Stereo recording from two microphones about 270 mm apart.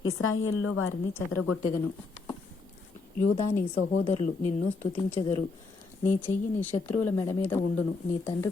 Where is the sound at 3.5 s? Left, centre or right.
Centre.